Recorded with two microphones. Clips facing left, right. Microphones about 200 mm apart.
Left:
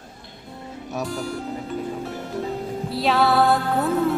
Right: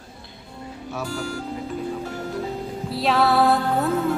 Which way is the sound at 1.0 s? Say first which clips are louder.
Left 1 dB; centre (ahead or behind).